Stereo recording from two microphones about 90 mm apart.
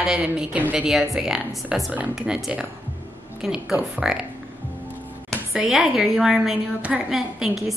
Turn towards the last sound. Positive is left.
turn(degrees=-5)  # may be behind; listen again after turning